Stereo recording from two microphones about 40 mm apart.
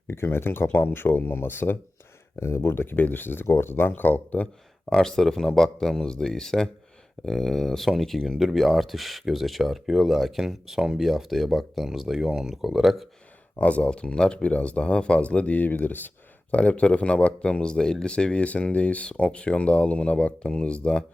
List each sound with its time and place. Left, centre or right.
0.1 s speech: left
2.4 s speech: left
4.9 s speech: centre
13.6 s speech: left
15.6 s speech: left
16.5 s speech: left
18.4 s speech: left